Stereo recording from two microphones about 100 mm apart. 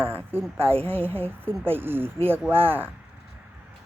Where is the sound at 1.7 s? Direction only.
20° right (ahead or behind).